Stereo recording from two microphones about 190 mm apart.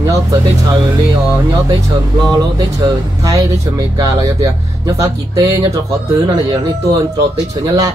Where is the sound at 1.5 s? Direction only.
20° right (ahead or behind).